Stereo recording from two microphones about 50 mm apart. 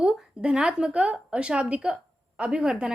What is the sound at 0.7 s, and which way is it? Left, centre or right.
A woman's voice, right.